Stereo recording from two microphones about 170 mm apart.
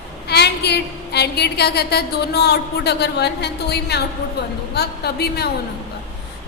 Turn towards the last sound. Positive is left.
turn(degrees=70)  # may be behind; listen again after turning